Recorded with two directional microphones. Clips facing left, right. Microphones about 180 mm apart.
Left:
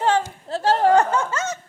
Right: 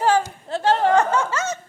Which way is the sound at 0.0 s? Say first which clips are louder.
Right 1 dB; 25° left (ahead or behind).